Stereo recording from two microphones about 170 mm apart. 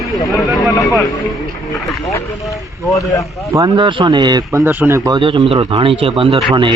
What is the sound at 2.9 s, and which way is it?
Speech, 20° left (ahead or behind).